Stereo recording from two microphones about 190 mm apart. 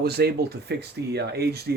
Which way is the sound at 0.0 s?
55° right (ahead or behind).